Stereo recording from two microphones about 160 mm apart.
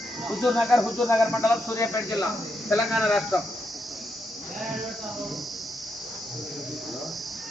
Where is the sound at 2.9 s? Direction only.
Centre (ahead or behind).